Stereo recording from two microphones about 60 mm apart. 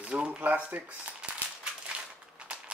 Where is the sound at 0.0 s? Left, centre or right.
Centre.